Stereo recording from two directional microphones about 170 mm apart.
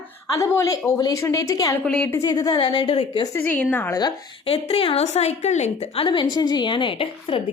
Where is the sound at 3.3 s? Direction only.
10° left (ahead or behind).